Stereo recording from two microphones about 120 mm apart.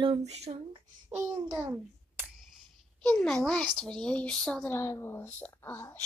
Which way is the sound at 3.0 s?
5° left (ahead or behind).